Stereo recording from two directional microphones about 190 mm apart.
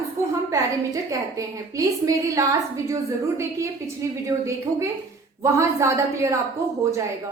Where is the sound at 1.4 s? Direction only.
15° right (ahead or behind).